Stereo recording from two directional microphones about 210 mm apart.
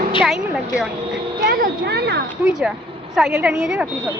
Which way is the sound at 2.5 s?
Centre (ahead or behind).